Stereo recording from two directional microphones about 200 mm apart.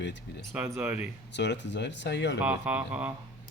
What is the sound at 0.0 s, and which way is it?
Speech, 60° left (ahead or behind).